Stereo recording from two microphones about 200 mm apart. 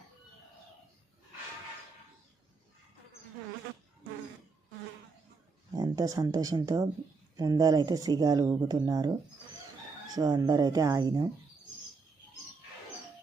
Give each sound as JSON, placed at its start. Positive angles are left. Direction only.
{"t": 5.7, "sound": "speech", "side_deg": -20}
{"t": 10.2, "sound": "speech", "side_deg": -20}